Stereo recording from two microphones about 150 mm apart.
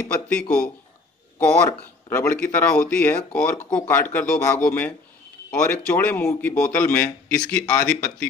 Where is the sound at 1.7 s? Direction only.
15° left (ahead or behind).